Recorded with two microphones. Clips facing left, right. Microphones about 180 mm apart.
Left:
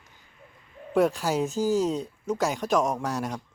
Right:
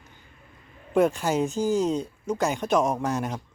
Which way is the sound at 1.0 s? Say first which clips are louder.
Right 1 dB; centre (ahead or behind).